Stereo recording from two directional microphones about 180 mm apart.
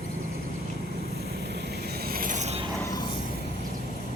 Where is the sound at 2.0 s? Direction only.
55° right (ahead or behind).